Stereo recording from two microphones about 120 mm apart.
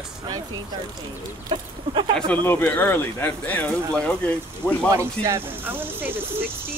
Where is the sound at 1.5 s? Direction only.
45° right (ahead or behind).